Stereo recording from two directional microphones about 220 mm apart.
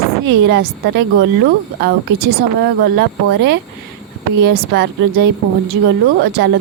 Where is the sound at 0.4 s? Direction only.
50° right (ahead or behind).